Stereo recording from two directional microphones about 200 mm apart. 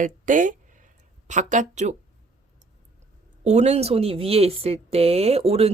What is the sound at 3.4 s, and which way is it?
Speech, 35° right (ahead or behind).